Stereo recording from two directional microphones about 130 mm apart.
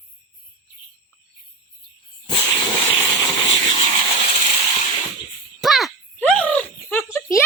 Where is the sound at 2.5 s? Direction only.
25° left (ahead or behind).